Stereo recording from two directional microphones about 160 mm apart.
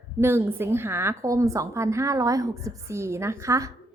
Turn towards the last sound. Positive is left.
turn(degrees=-20)  # may be behind; listen again after turning